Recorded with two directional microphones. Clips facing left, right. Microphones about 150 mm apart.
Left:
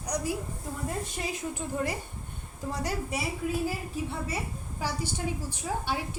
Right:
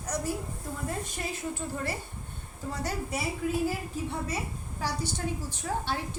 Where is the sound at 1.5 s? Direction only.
15° left (ahead or behind).